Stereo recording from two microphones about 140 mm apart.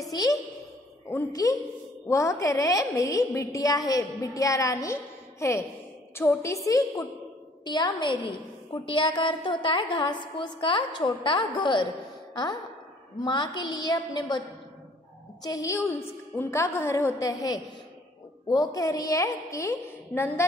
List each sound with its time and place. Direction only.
0.1 s a child's voice: 25° left (ahead or behind)
13.2 s a woman's voice: 30° left (ahead or behind)
15.4 s a woman's voice: 25° left (ahead or behind)